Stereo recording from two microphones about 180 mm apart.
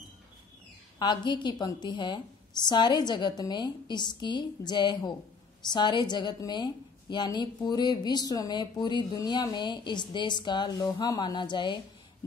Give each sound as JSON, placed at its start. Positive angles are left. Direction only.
{"t": 0.9, "sound": "a woman's voice", "side_deg": 25}